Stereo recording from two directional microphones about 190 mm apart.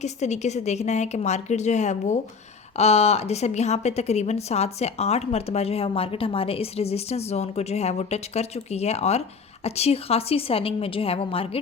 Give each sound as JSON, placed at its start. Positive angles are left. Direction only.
{"t": 0.0, "sound": "a woman's voice", "side_deg": 35}